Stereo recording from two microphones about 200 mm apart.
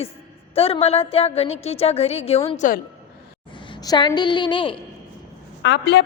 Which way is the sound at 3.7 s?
20° left (ahead or behind).